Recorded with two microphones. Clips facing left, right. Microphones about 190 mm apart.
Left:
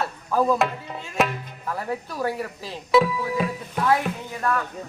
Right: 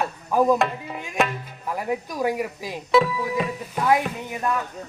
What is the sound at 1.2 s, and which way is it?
Speech, centre (ahead or behind).